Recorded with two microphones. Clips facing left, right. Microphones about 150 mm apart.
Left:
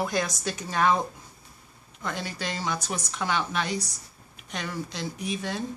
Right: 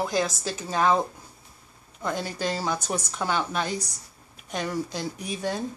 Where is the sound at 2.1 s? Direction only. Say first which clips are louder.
Right 5 dB; 40° right (ahead or behind).